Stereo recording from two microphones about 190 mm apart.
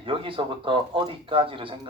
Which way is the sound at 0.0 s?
25° right (ahead or behind).